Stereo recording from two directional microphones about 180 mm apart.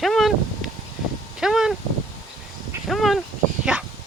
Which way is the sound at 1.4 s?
5° right (ahead or behind).